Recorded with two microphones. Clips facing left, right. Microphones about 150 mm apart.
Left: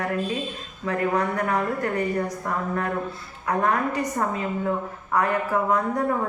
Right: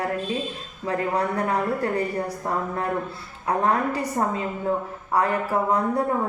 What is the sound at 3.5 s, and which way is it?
Speech, 30° right (ahead or behind).